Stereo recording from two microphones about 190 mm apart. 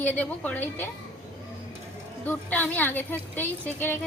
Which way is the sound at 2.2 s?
10° left (ahead or behind).